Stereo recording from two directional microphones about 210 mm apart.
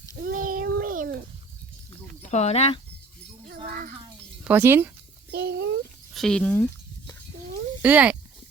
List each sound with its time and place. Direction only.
0.2 s a sound: 40° right (ahead or behind)
2.2 s speech: 30° left (ahead or behind)
3.6 s music: 40° right (ahead or behind)
4.4 s speech: 10° right (ahead or behind)
5.3 s a sound: 50° right (ahead or behind)
6.1 s speech: 5° left (ahead or behind)
7.8 s speech: 5° right (ahead or behind)